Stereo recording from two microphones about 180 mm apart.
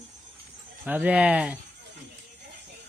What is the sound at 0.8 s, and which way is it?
Speech, 10° right (ahead or behind).